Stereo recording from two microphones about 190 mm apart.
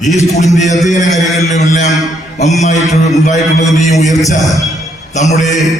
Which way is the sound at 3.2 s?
40° left (ahead or behind).